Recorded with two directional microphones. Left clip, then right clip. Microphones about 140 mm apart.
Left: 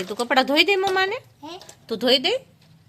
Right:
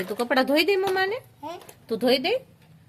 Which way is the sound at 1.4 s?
10° right (ahead or behind).